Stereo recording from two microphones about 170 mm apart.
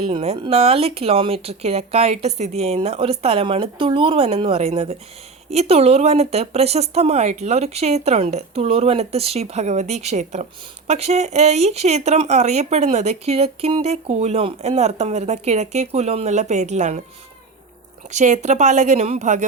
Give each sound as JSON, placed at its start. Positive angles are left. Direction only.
{"t": 0.0, "sound": "speech", "side_deg": -35}
{"t": 18.1, "sound": "a woman's voice", "side_deg": -45}